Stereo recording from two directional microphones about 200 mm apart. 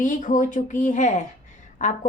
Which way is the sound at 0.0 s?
40° left (ahead or behind).